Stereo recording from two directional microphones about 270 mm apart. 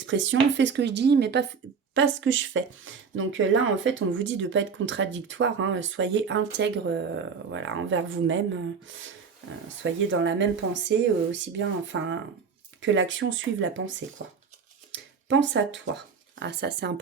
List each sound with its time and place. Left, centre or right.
0.0 s speech: right
14.9 s a sound: right
16.4 s speech: right